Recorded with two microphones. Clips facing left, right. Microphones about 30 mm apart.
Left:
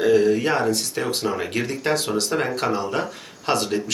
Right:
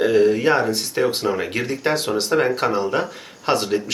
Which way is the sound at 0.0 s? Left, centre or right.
Centre.